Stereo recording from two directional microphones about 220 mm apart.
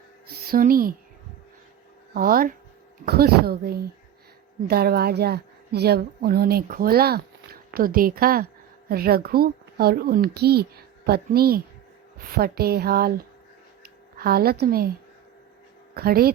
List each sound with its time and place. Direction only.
0.3 s speech: 40° right (ahead or behind)
2.1 s a child's voice: 40° right (ahead or behind)
13.8 s a sound: 45° right (ahead or behind)
14.6 s a child's voice: 45° right (ahead or behind)
16.0 s a child's voice: 45° right (ahead or behind)